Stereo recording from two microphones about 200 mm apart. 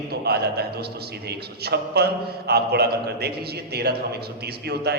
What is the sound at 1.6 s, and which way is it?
A man's voice, 55° right (ahead or behind).